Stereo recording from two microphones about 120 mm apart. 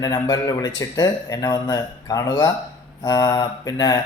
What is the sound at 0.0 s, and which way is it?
A man's voice, 35° left (ahead or behind).